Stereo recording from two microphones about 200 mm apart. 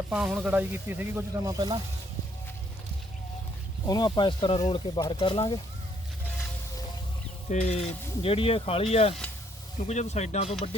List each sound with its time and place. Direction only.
0.1 s speech: 5° right (ahead or behind)
3.8 s speech: 20° left (ahead or behind)
7.5 s speech: 35° left (ahead or behind)